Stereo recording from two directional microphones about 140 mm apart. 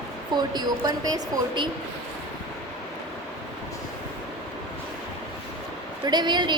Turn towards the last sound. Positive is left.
turn(degrees=-30)  # may be behind; listen again after turning